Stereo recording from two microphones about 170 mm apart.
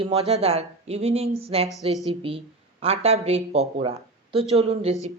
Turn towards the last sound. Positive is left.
turn(degrees=-35)  # may be behind; listen again after turning